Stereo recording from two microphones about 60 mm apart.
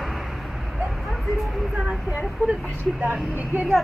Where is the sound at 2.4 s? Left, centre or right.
Right.